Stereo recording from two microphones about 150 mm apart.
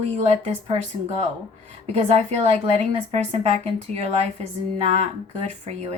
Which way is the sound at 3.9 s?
45° right (ahead or behind).